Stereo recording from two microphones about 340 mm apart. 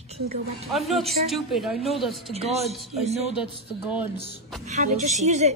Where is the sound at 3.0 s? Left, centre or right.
Centre.